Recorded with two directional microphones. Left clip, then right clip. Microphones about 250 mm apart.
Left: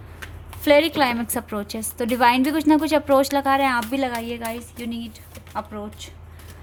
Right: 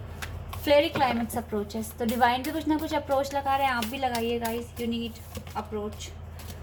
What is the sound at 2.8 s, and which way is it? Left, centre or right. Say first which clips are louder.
Speech: left 9 dB; left.